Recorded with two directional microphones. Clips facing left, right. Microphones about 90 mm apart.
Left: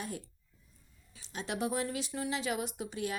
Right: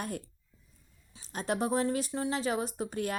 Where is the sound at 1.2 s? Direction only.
40° right (ahead or behind).